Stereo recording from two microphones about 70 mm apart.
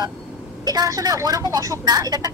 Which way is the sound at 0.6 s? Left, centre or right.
Right.